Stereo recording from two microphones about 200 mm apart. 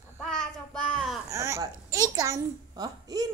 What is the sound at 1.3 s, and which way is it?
A child's voice, 15° right (ahead or behind).